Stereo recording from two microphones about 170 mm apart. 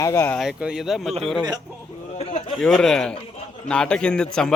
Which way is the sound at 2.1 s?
35° left (ahead or behind).